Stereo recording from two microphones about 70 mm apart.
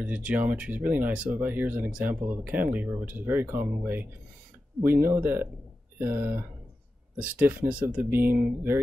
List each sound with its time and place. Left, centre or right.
0.0 s speech: centre
7.2 s speech: centre